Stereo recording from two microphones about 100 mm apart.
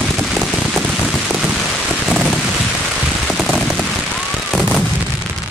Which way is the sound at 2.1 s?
Centre (ahead or behind).